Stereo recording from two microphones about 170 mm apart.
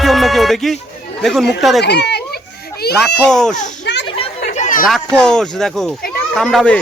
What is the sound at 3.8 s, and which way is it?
Children playing, 90° left.